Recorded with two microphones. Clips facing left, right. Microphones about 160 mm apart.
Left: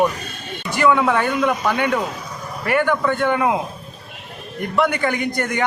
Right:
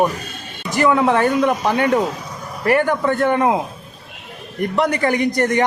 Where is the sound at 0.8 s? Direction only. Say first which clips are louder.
Right 1 dB; 30° right (ahead or behind).